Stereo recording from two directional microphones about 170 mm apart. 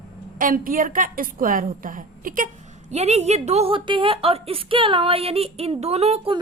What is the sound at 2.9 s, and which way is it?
A woman's voice, 40° right (ahead or behind).